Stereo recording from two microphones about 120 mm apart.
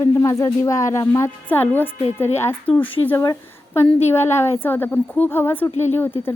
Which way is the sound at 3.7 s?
20° left (ahead or behind).